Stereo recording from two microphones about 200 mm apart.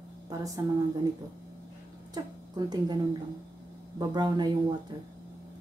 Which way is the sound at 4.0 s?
20° right (ahead or behind).